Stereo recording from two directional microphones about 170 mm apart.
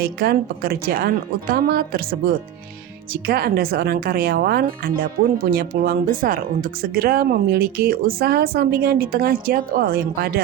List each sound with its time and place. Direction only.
0.0 s speech: 65° right (ahead or behind)